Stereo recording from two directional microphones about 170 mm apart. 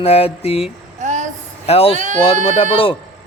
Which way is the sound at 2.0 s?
45° right (ahead or behind).